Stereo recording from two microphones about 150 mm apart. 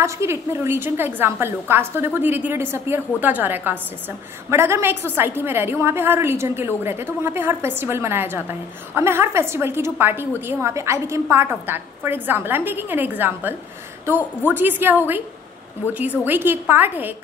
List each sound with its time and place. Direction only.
0.0 s a woman's voice: 20° right (ahead or behind)